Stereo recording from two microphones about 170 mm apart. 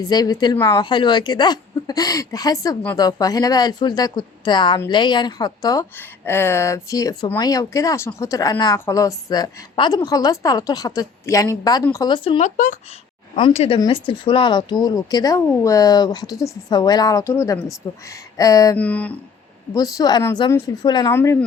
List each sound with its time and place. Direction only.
0.0 s speech: 20° left (ahead or behind)
6.0 s speech: 10° left (ahead or behind); by 12.4 s 30° left (ahead or behind)
12.4 s speech: 50° left (ahead or behind)
13.3 s speech: 35° left (ahead or behind)
18.8 s speech: 10° left (ahead or behind)
19.7 s speech: 20° left (ahead or behind)